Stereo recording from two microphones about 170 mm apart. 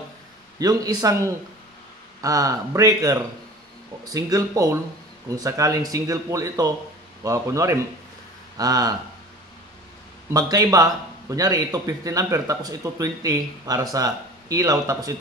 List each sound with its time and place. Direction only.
0.6 s a man's voice: 20° right (ahead or behind)
10.3 s a man's voice: 20° right (ahead or behind)